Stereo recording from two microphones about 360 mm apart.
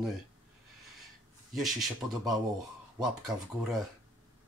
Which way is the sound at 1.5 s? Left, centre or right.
Centre.